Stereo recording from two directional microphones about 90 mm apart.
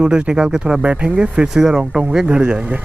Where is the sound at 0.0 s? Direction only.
10° right (ahead or behind).